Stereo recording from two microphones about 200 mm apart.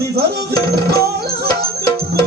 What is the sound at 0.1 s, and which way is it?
Tabla, 55° right (ahead or behind).